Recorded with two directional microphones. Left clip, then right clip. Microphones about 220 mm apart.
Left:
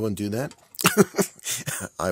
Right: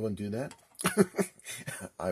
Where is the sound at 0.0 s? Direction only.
45° left (ahead or behind).